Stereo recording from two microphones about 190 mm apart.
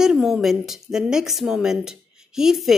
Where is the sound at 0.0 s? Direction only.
Centre (ahead or behind).